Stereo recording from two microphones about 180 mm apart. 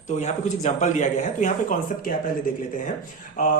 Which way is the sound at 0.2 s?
40° left (ahead or behind).